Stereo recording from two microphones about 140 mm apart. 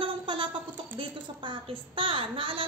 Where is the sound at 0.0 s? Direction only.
35° right (ahead or behind).